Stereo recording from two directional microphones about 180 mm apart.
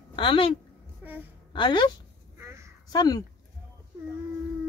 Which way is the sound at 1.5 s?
25° left (ahead or behind).